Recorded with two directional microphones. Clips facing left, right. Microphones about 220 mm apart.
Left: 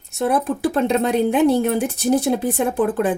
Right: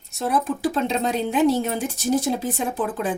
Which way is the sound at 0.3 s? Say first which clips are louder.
Left 3 dB; 60° left (ahead or behind).